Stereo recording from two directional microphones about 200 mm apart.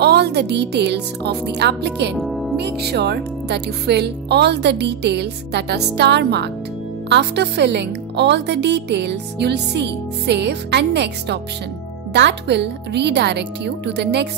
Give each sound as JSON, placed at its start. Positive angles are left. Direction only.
{"t": 0.0, "sound": "speech", "side_deg": -55}
{"t": 2.1, "sound": "music", "side_deg": 0}
{"t": 2.5, "sound": "speech", "side_deg": -55}